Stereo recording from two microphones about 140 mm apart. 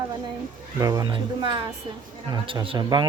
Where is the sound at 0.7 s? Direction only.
25° right (ahead or behind).